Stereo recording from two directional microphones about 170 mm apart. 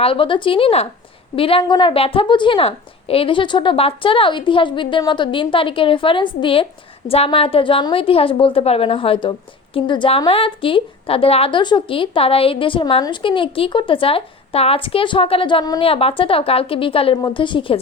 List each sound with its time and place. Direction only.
0.0 s a woman's voice: 30° left (ahead or behind)